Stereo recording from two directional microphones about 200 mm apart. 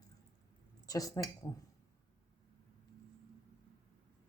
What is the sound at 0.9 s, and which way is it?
Speech, 15° left (ahead or behind).